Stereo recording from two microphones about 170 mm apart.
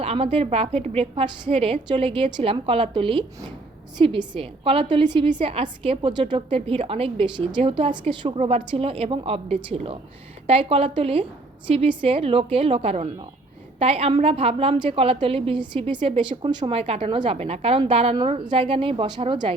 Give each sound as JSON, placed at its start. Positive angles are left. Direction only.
{"t": 0.0, "sound": "a woman's voice", "side_deg": -35}